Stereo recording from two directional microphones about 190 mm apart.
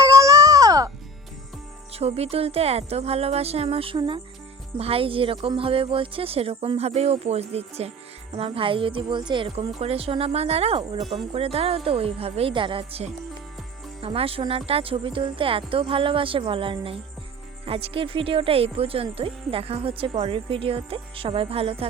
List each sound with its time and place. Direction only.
0.0 s music: 15° right (ahead or behind)
1.9 s speech: 30° right (ahead or behind)